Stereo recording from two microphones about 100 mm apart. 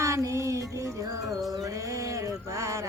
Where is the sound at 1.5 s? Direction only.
35° right (ahead or behind).